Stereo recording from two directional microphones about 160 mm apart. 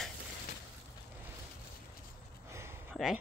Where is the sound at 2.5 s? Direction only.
15° right (ahead or behind).